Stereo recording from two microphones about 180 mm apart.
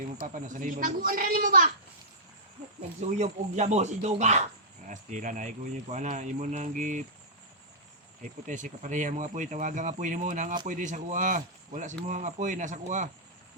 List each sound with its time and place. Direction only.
0.3 s speech: 45° right (ahead or behind)
3.2 s speech: 40° right (ahead or behind)
8.2 s speech: 45° right (ahead or behind)